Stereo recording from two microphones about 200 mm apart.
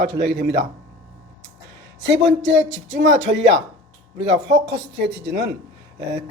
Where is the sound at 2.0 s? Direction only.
65° right (ahead or behind).